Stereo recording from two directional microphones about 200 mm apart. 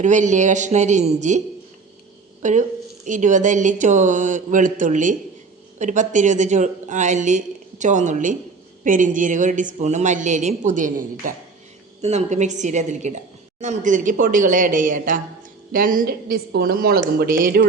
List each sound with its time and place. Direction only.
0.0 s a woman's voice: 35° right (ahead or behind)
2.4 s a woman's voice: 40° right (ahead or behind)